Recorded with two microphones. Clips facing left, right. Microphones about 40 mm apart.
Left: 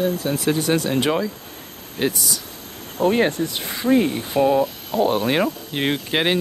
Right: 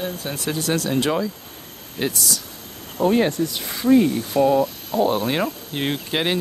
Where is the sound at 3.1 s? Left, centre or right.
Left.